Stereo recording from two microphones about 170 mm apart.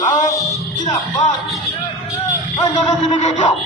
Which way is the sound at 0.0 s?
45° left (ahead or behind).